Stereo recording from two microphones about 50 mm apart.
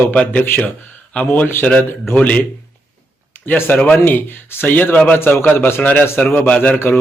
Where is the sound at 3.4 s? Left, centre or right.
Left.